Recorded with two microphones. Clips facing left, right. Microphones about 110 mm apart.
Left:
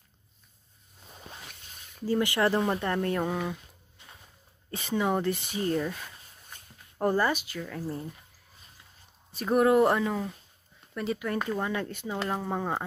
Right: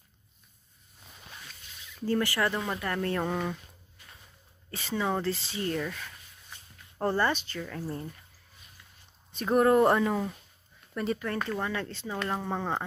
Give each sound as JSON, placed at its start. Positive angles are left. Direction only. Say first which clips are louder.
{"t": 1.5, "sound": "a sound", "louder": "even", "side_deg": 50}
{"t": 2.0, "sound": "speech", "louder": "left 2 dB", "side_deg": 15}
{"t": 3.3, "sound": "speech", "louder": "even", "side_deg": 5}
{"t": 4.0, "sound": "a sound", "louder": "left 2 dB", "side_deg": 25}
{"t": 4.6, "sound": "speech", "louder": "left 2 dB", "side_deg": 20}
{"t": 9.3, "sound": "speech", "louder": "even", "side_deg": 5}
{"t": 11.2, "sound": "speech", "louder": "left 2 dB", "side_deg": 10}